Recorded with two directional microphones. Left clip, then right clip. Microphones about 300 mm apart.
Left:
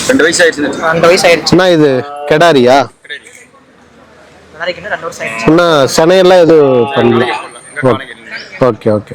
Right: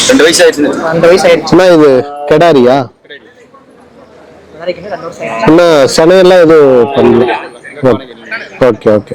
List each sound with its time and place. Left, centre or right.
0.2 s speech: left
4.6 s speech: left